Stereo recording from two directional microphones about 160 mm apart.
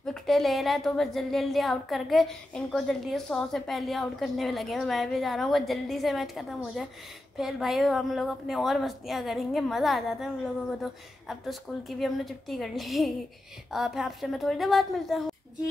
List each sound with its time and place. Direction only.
0.0 s speech: centre (ahead or behind)